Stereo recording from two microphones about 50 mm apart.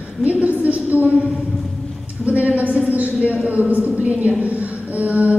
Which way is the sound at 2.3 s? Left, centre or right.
Right.